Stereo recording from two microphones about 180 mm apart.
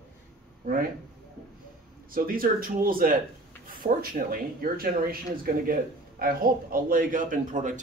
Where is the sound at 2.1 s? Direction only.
50° right (ahead or behind).